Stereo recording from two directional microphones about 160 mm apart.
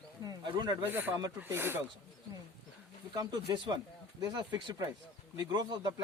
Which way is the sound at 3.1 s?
25° right (ahead or behind).